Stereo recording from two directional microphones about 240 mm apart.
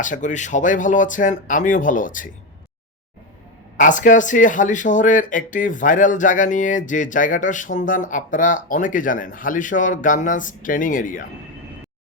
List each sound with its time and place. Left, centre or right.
0.0 s speech: left
3.8 s speech: left